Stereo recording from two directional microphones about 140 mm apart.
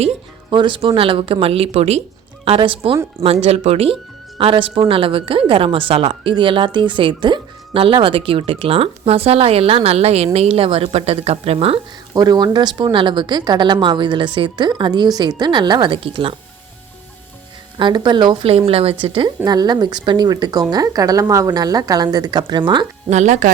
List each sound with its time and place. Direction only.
0.5 s a woman's voice: 35° right (ahead or behind)
12.1 s a woman's voice: 30° right (ahead or behind)
17.7 s a woman's voice: 35° right (ahead or behind)
18.5 s a woman's voice: 45° right (ahead or behind)
23.0 s a woman's voice: 55° right (ahead or behind)